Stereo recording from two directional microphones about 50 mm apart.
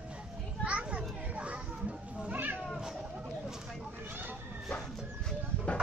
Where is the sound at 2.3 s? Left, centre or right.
Right.